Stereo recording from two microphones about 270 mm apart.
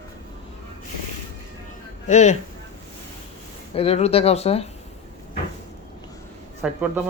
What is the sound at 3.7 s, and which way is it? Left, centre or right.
Speech, left.